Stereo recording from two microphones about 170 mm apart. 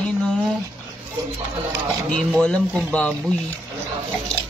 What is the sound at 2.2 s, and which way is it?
Speech, 5° left (ahead or behind).